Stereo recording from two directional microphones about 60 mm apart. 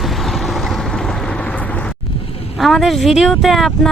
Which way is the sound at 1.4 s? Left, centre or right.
Left.